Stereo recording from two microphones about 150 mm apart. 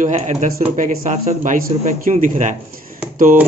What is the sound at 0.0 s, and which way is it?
Speech, 55° right (ahead or behind).